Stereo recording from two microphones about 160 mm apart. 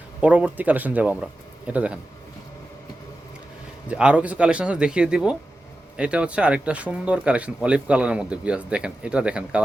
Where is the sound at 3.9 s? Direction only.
5° right (ahead or behind).